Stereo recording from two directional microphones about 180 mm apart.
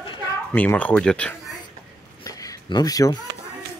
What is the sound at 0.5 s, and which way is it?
Speech, 10° left (ahead or behind).